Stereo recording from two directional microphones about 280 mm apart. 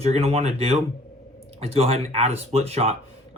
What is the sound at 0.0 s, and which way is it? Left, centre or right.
Speech, right.